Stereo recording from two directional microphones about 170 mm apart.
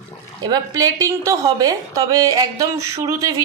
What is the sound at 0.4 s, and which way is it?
A woman's voice, 20° right (ahead or behind).